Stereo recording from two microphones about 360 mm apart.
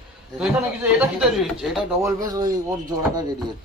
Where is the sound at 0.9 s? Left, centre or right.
Centre.